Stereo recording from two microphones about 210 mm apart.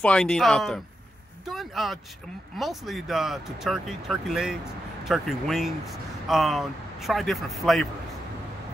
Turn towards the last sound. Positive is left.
turn(degrees=0)  # may be behind; listen again after turning